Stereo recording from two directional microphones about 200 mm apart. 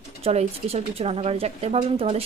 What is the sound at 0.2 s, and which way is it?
Speech, 30° right (ahead or behind).